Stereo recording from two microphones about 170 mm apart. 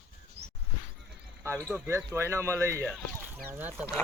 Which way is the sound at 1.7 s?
15° right (ahead or behind).